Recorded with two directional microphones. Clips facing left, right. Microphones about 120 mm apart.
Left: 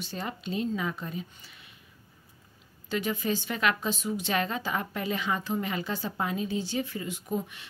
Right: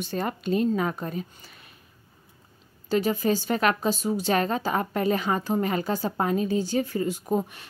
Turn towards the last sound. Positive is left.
turn(degrees=-40)  # may be behind; listen again after turning